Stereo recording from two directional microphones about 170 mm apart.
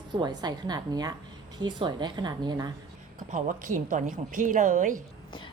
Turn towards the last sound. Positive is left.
turn(degrees=-50)  # may be behind; listen again after turning